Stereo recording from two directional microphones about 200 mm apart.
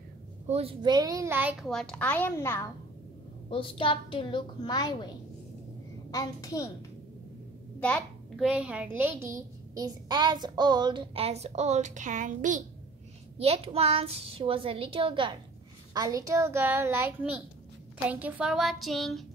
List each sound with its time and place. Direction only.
0.5 s a woman's voice: 30° right (ahead or behind); by 2.7 s 10° left (ahead or behind)
3.4 s a woman's voice: 25° left (ahead or behind)
6.1 s a child's voice: 15° left (ahead or behind)
7.8 s a child's voice: centre (ahead or behind); by 12.6 s 40° right (ahead or behind)
13.4 s a child's voice: 30° right (ahead or behind); by 19.2 s centre (ahead or behind)